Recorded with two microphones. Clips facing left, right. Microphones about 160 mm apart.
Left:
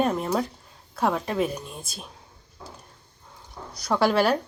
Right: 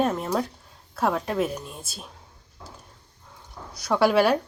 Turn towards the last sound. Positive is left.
turn(degrees=0)  # may be behind; listen again after turning